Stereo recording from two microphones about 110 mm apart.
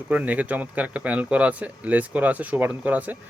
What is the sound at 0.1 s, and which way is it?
Speech, 15° right (ahead or behind).